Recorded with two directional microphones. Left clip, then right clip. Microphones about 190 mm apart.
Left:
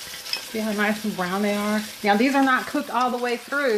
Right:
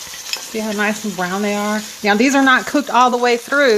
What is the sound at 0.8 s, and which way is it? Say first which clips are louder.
Speech: right 5 dB; 25° right (ahead or behind).